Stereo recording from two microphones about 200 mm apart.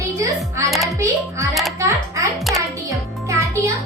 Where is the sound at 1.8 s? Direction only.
15° right (ahead or behind).